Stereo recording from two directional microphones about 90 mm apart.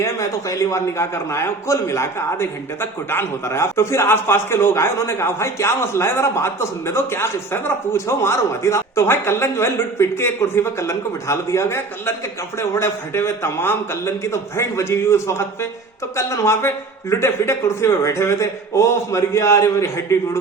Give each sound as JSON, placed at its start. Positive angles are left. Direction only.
{"t": 0.0, "sound": "a man's voice", "side_deg": 35}